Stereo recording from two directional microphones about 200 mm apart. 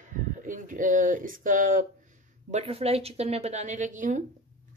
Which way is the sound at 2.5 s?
30° right (ahead or behind).